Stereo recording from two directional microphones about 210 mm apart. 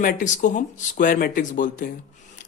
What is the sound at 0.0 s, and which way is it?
Speech, 40° left (ahead or behind).